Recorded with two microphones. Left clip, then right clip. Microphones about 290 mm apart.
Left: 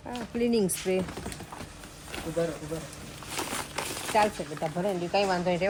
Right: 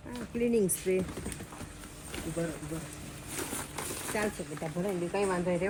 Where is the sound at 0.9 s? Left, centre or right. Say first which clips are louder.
Left 2 dB; left.